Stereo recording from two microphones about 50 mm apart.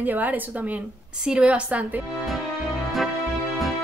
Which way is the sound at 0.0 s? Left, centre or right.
Right.